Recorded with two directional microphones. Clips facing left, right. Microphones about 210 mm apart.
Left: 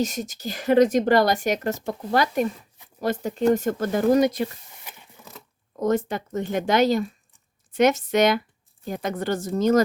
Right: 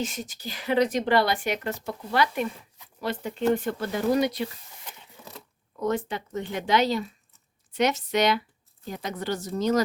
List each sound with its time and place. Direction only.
0.0 s speech: 40° left (ahead or behind)
4.9 s mechanisms: 10° left (ahead or behind)
5.7 s speech: 45° left (ahead or behind)